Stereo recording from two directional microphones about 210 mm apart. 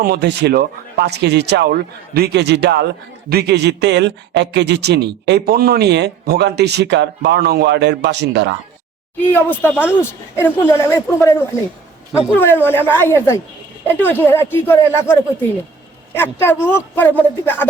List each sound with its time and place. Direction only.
0.0 s speech: 50° right (ahead or behind)
9.1 s speech: 10° left (ahead or behind)